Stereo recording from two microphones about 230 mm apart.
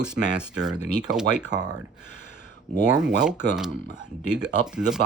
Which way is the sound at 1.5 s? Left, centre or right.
Centre.